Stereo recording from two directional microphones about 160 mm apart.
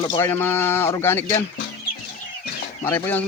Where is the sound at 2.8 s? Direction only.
15° left (ahead or behind).